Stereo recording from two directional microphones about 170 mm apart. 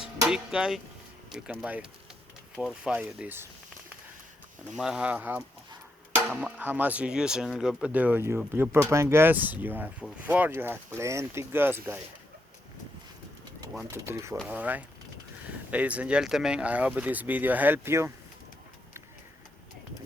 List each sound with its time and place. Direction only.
0.3 s speech: 5° right (ahead or behind)
4.7 s speech: 5° right (ahead or behind)
13.8 s speech: 15° right (ahead or behind)